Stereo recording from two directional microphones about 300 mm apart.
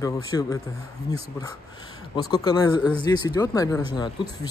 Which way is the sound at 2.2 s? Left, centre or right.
Centre.